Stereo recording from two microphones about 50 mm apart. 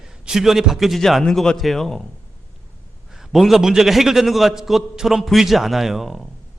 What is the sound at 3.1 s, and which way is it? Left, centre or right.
A man's voice, centre.